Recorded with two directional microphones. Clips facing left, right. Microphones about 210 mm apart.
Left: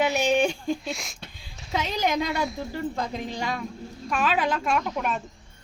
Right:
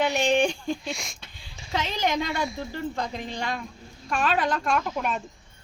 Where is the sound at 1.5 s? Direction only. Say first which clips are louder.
Left 1 dB; 5° left (ahead or behind).